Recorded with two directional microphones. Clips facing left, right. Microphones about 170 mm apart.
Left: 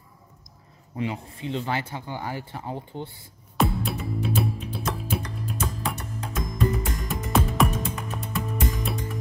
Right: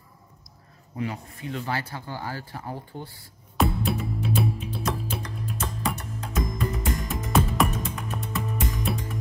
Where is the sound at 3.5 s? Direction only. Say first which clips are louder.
Even; centre (ahead or behind).